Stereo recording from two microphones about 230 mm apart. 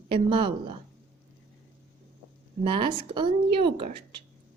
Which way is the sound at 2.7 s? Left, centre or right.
Right.